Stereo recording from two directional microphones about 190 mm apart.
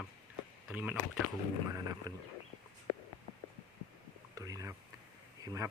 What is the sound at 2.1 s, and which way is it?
Speech, 20° right (ahead or behind).